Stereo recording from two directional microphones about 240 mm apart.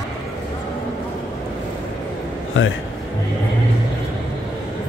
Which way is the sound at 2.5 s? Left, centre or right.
Left.